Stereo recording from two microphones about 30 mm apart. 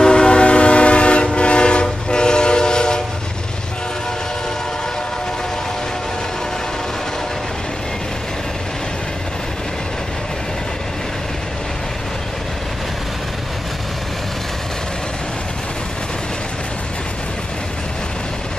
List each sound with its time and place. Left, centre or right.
0.0 s train: left